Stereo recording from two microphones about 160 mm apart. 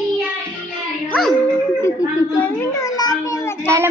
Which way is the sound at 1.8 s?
15° left (ahead or behind).